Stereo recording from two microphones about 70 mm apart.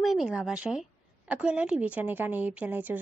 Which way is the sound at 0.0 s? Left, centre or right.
Centre.